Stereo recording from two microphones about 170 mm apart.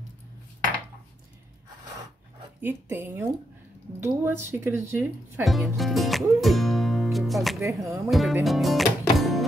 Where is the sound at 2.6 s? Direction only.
10° right (ahead or behind).